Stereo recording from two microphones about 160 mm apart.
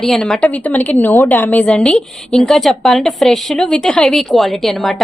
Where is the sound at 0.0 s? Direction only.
5° left (ahead or behind).